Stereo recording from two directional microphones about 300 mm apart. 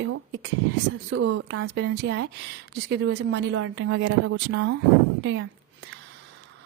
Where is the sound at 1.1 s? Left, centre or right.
Right.